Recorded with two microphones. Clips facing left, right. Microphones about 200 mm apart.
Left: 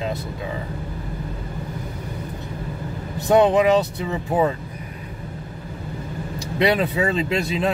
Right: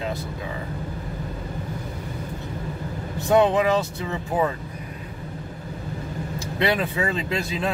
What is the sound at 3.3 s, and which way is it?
Speech, 20° left (ahead or behind).